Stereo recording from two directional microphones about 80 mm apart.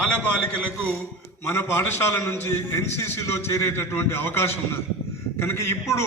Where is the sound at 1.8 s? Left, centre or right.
Left.